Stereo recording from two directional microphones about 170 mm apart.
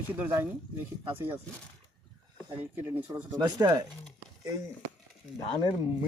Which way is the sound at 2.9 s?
10° right (ahead or behind).